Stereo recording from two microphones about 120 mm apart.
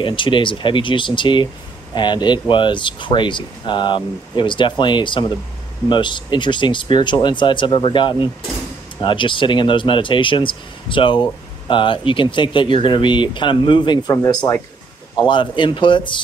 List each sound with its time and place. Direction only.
0.0 s speech: 45° left (ahead or behind)
15.2 s speech: 40° left (ahead or behind)